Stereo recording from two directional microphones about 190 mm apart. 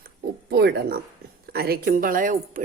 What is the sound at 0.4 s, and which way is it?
Speech, 55° right (ahead or behind).